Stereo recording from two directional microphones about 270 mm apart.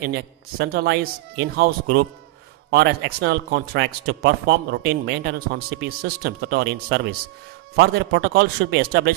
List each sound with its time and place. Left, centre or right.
0.6 s speech: right